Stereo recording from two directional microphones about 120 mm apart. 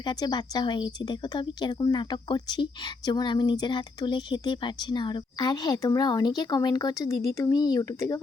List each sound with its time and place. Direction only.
0.0 s a woman's voice: 35° left (ahead or behind)